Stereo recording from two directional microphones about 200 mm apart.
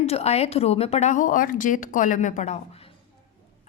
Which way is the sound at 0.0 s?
30° left (ahead or behind).